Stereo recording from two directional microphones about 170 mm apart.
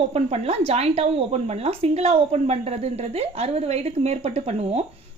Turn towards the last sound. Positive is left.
turn(degrees=-40)  # may be behind; listen again after turning